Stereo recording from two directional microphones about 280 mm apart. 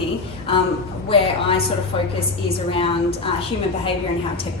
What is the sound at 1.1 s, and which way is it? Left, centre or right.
Speech, centre.